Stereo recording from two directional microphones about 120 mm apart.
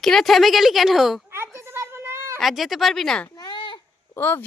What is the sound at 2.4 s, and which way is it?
Speech, centre (ahead or behind).